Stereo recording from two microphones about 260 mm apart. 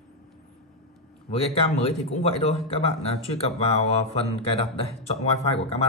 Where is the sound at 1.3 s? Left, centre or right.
Left.